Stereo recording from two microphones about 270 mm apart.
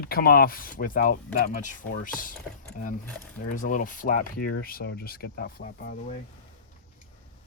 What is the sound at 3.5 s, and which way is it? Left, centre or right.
Speech, left.